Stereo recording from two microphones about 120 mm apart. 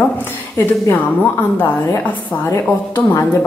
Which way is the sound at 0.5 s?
20° left (ahead or behind).